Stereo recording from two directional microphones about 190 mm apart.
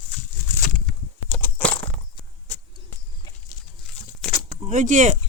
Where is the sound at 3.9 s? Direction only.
5° left (ahead or behind).